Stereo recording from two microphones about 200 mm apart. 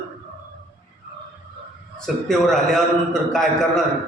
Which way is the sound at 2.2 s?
Centre (ahead or behind).